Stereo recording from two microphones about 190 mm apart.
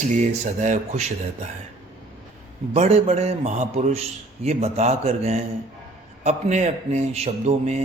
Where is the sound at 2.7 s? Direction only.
35° right (ahead or behind).